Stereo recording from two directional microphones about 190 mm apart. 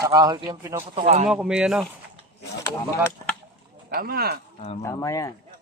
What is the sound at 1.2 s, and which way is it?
Speech, 5° right (ahead or behind).